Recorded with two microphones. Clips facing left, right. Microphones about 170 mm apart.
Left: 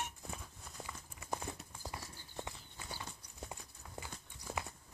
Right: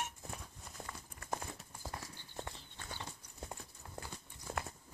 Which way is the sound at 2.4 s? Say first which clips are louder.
Even; 10° left (ahead or behind).